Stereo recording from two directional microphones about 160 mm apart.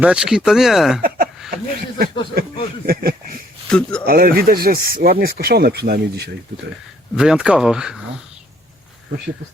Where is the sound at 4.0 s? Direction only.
65° right (ahead or behind); by 6.3 s 85° right.